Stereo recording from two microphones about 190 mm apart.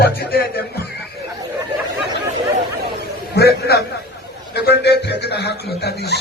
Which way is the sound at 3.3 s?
60° left (ahead or behind).